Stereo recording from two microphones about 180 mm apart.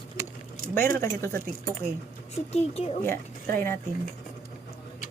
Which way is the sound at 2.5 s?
35° left (ahead or behind).